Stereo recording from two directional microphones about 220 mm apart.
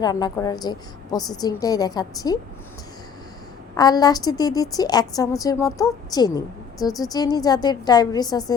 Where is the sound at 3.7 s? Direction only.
20° left (ahead or behind).